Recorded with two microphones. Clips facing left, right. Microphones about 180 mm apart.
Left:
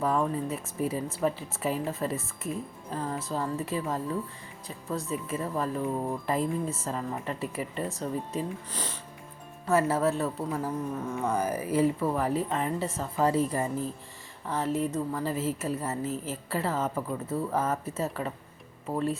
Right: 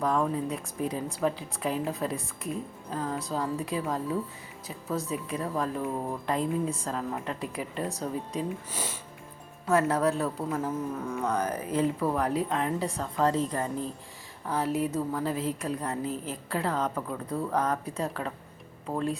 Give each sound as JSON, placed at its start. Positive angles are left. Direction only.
{"t": 0.0, "sound": "a woman's voice", "side_deg": 0}